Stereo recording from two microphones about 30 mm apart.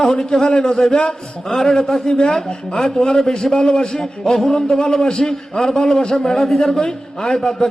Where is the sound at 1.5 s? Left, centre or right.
Centre.